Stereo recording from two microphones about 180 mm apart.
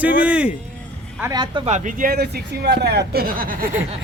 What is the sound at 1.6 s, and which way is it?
Speech, 40° right (ahead or behind).